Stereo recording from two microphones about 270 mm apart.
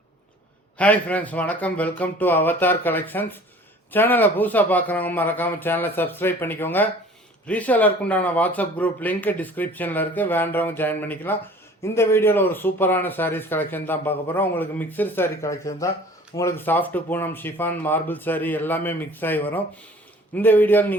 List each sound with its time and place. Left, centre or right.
0.8 s speech: centre